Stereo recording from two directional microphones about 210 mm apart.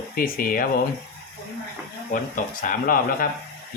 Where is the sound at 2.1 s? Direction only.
40° left (ahead or behind).